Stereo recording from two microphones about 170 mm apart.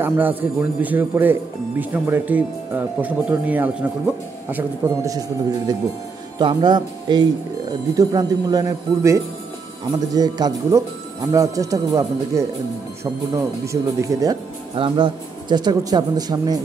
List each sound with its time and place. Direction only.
0.0 s speech: 10° right (ahead or behind)
6.3 s speech: 25° right (ahead or behind)